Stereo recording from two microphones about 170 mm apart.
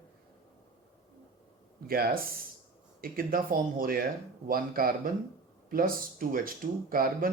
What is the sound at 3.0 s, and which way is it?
Speech, 60° right (ahead or behind).